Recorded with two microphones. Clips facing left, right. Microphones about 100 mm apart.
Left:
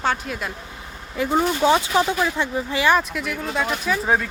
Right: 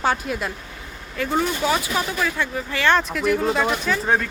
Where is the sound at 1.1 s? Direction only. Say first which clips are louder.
Left 2 dB; 20° left (ahead or behind).